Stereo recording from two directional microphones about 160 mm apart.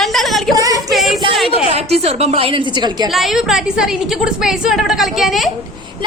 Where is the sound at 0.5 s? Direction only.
20° right (ahead or behind).